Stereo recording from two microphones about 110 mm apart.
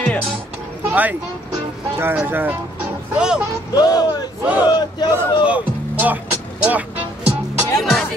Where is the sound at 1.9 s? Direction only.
20° right (ahead or behind).